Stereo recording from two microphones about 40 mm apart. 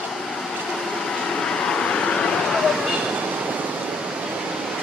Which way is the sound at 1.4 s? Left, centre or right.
Centre.